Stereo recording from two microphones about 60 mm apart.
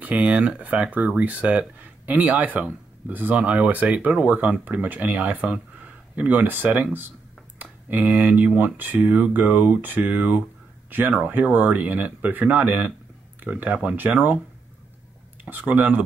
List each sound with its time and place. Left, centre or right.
0.0 s speech: right
15.4 s speech: right